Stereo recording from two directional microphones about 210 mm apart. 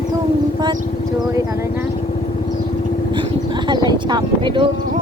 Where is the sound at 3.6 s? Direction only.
20° right (ahead or behind).